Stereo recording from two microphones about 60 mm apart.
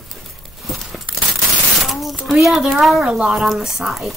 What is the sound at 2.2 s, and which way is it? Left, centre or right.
Speech, centre.